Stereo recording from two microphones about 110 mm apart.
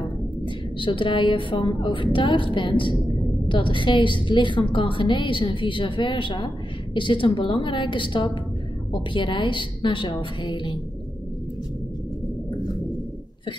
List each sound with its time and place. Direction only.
0.7 s a woman's voice: 50° left (ahead or behind)